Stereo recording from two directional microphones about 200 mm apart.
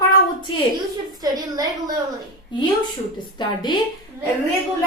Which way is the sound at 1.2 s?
20° right (ahead or behind).